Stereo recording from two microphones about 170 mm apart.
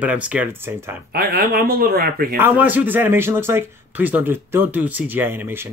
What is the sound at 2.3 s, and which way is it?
Speech, 10° right (ahead or behind).